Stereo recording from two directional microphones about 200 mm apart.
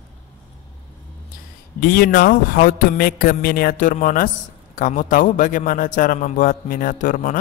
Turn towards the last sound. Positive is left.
turn(degrees=40)  # may be behind; listen again after turning